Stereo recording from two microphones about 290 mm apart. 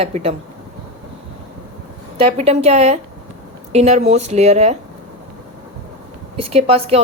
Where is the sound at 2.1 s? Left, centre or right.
Right.